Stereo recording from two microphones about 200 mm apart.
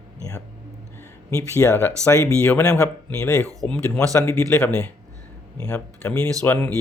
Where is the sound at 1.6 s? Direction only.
10° left (ahead or behind).